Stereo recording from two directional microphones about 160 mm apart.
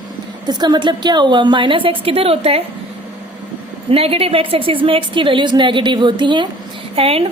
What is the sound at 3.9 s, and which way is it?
A woman's voice, 35° right (ahead or behind).